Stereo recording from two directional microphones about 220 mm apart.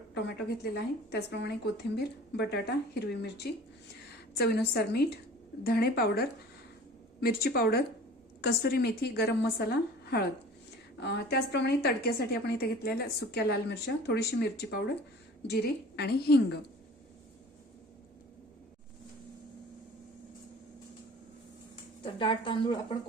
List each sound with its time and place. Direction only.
0.1 s a woman's voice: 50° left (ahead or behind)
22.0 s a woman's voice: 20° left (ahead or behind)